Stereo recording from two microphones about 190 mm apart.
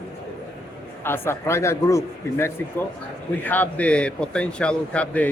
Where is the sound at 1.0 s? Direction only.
10° left (ahead or behind).